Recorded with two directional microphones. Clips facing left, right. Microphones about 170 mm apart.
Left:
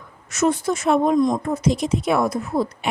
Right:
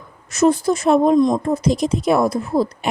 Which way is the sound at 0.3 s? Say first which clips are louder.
Right 4 dB; 35° right (ahead or behind).